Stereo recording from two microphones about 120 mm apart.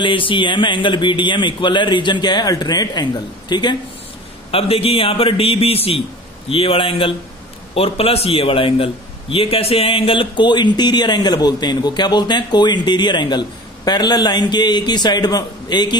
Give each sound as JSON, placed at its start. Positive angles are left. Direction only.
{"t": 0.0, "sound": "a man's voice", "side_deg": 45}
{"t": 4.5, "sound": "a man's voice", "side_deg": 55}